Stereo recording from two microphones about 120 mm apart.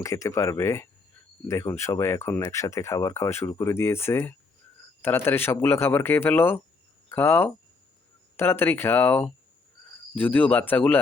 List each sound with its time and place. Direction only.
0.0 s speech: 25° left (ahead or behind)